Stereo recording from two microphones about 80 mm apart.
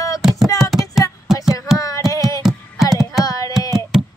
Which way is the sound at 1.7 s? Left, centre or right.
Left.